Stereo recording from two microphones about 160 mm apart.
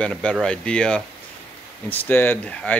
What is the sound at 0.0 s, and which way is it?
Speech, 5° left (ahead or behind).